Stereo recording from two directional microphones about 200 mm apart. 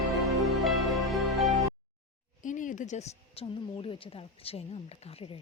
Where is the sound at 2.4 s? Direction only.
40° left (ahead or behind).